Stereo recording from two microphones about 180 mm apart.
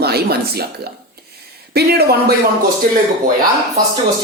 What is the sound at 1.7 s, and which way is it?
Speech, 60° right (ahead or behind).